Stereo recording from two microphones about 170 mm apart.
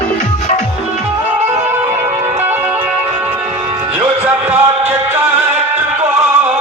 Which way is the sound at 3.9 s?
10° right (ahead or behind).